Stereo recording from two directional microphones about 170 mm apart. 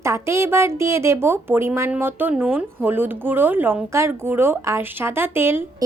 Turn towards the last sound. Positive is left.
turn(degrees=-15)  # may be behind; listen again after turning